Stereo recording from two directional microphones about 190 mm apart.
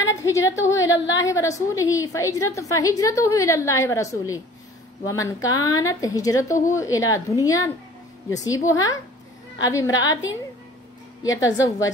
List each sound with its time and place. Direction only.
0.1 s a woman's voice: 15° left (ahead or behind)
0.7 s a woman's voice: 85° left
1.2 s a woman's voice: 15° left (ahead or behind)
11.2 s a woman's voice: 15° left (ahead or behind)